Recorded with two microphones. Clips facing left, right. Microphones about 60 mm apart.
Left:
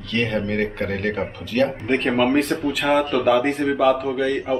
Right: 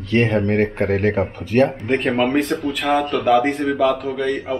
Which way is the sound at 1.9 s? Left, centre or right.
Centre.